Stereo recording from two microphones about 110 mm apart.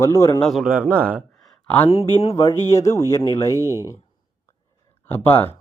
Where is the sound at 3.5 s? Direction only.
30° right (ahead or behind).